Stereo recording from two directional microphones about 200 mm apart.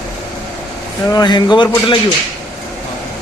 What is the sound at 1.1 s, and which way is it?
Speech, 20° left (ahead or behind).